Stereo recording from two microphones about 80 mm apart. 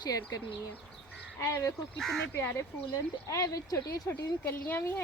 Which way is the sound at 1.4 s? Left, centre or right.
Left.